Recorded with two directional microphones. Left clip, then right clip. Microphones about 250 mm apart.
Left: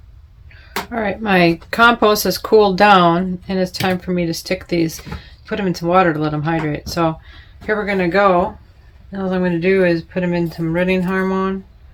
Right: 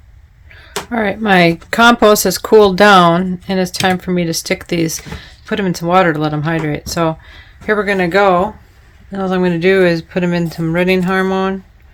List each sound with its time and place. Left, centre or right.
0.9 s speech: right